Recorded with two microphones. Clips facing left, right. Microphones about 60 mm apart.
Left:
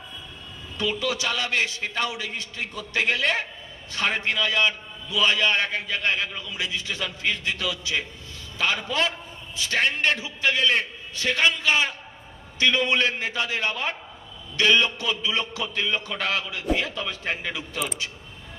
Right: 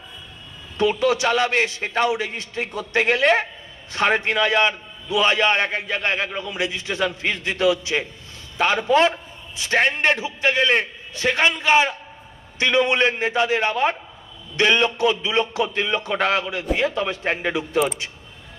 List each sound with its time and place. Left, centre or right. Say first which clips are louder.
0.8 s a man's voice: right 8 dB; right